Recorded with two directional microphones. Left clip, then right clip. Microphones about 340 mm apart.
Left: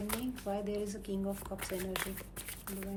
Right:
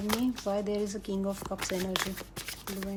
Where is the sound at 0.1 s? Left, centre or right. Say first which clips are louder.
Right 9 dB; centre.